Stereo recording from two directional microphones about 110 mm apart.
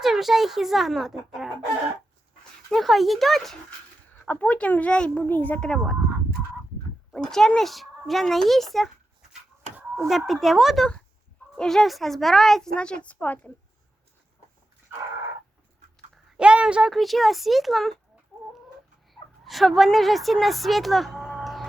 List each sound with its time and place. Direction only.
0.0 s a woman's voice: 5° right (ahead or behind)
7.1 s a woman's voice: 5° left (ahead or behind)
9.7 s a sound: 25° right (ahead or behind)
10.1 s a woman's voice: centre (ahead or behind); by 13.5 s 15° left (ahead or behind)
16.4 s a woman's voice: 10° right (ahead or behind)
19.1 s speech: centre (ahead or behind)